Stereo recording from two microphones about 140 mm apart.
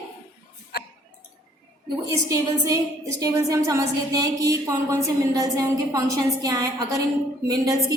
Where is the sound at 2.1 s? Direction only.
25° right (ahead or behind).